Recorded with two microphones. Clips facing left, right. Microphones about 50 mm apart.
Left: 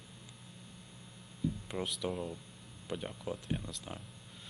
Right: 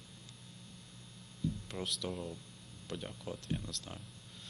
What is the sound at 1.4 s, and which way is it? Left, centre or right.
Speech, centre.